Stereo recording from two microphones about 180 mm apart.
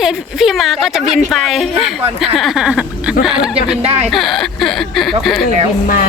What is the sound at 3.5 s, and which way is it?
Speech, 35° right (ahead or behind).